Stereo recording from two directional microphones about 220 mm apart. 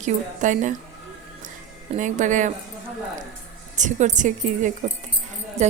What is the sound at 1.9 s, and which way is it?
Speech, 35° right (ahead or behind).